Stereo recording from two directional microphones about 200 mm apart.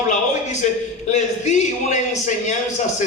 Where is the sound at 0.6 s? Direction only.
35° left (ahead or behind).